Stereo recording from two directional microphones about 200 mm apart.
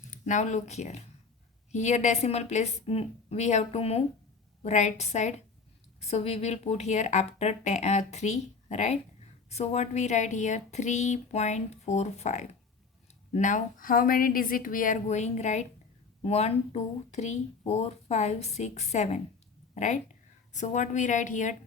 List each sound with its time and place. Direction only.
0.1 s speech: 40° left (ahead or behind)